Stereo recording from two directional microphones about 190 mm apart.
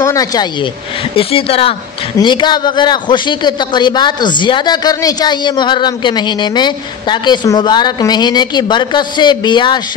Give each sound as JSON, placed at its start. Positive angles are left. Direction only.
{"t": 0.0, "sound": "a man's voice", "side_deg": 20}